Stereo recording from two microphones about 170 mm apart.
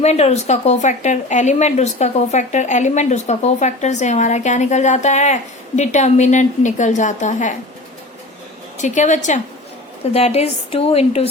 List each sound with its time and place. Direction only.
0.0 s speech: 40° left (ahead or behind)
8.8 s a woman's voice: 45° left (ahead or behind)